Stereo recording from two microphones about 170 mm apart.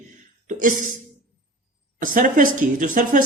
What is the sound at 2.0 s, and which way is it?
A man's voice, 50° right (ahead or behind).